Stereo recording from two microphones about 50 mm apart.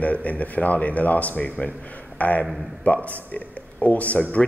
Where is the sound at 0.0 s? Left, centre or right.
Left.